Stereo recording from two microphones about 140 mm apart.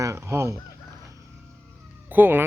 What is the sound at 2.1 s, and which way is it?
Speech, 15° right (ahead or behind).